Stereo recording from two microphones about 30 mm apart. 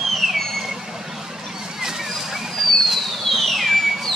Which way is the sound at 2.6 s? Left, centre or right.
Centre.